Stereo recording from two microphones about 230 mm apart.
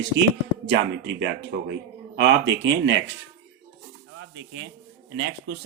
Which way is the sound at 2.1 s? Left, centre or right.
Right.